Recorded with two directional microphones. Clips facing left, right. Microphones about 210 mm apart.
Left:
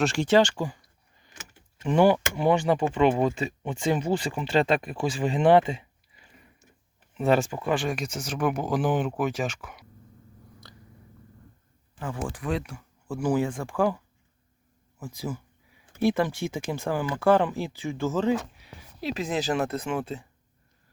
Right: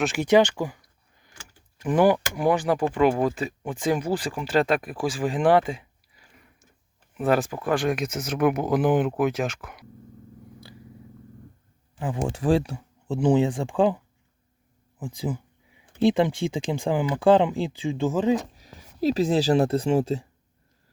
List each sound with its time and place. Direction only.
0.0 s speech: centre (ahead or behind)
1.3 s power windows: 20° left (ahead or behind)
1.8 s speech: 5° right (ahead or behind)
7.1 s speech: 5° right (ahead or behind)
11.9 s speech: 20° right (ahead or behind)
12.3 s speech: 30° right (ahead or behind)
18.5 s speech: 40° right (ahead or behind)